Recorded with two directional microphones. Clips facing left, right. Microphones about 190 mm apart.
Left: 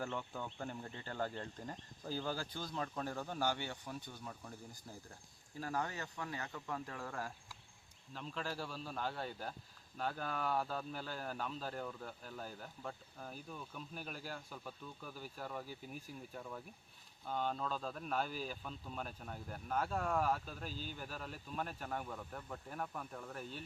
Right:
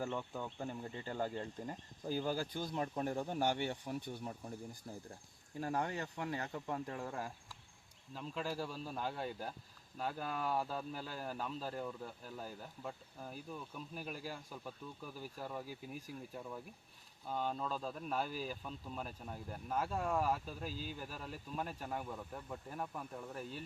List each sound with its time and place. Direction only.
0.0 s speech: 10° right (ahead or behind); by 3.9 s 25° right (ahead or behind)
5.5 s speech: 25° right (ahead or behind)
8.1 s speech: 10° right (ahead or behind)